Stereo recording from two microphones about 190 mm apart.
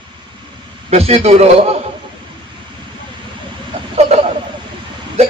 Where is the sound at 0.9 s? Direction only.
35° right (ahead or behind).